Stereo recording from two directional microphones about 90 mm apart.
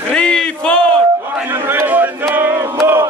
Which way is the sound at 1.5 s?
25° right (ahead or behind).